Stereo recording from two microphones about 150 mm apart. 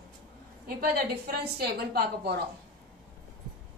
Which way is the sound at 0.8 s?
90° right.